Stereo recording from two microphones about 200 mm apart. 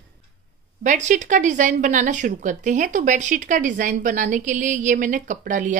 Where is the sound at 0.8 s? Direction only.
40° right (ahead or behind).